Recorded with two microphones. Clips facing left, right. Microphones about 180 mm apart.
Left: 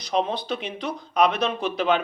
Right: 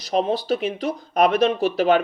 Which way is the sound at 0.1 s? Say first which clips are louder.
Right 4 dB; 45° right (ahead or behind).